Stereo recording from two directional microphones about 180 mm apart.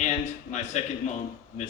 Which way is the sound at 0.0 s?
40° left (ahead or behind).